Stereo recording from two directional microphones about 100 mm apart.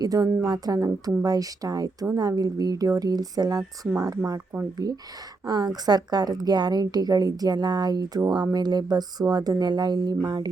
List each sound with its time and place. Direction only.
0.0 s a woman's voice: 35° right (ahead or behind)